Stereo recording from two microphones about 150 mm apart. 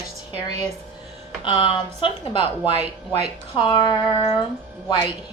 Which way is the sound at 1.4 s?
35° left (ahead or behind).